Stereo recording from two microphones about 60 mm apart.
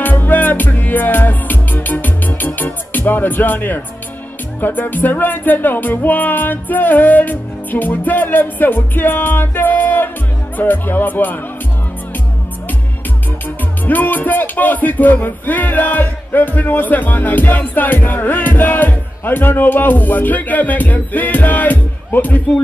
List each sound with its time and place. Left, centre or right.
0.0 s music: left
13.8 s music: left